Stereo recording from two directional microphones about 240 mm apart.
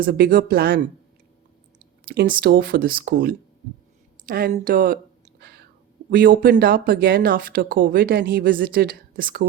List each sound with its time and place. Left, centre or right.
0.0 s speech: right
2.4 s speech: right
5.4 s whispering: right
6.1 s speech: right